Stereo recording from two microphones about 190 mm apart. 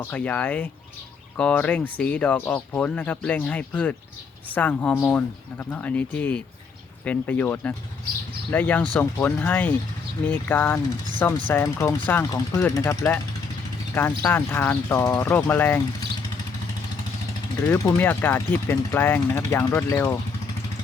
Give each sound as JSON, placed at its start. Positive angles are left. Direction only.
{"t": 0.0, "sound": "speech", "side_deg": 10}
{"t": 17.7, "sound": "speech", "side_deg": 10}